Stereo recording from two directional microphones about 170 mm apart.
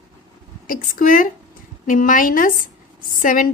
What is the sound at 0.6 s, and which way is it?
A woman's voice, 55° left (ahead or behind).